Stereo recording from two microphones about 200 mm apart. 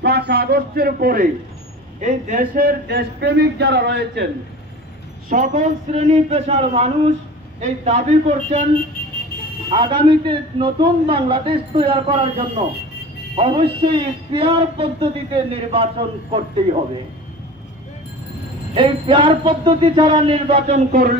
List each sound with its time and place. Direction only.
0.0 s a man's voice: 55° right (ahead or behind)
5.3 s a man's voice: 40° right (ahead or behind)
9.7 s a man's voice: 25° right (ahead or behind)
18.8 s a man's voice: 25° right (ahead or behind)